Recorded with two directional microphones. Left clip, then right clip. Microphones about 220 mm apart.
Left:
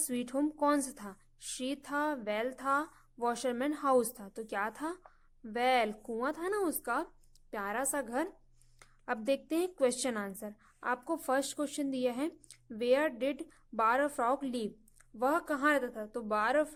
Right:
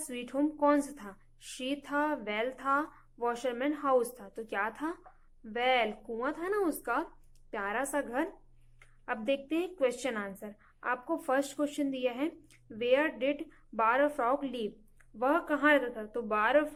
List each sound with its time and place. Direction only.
0.1 s a woman's voice: 40° left (ahead or behind)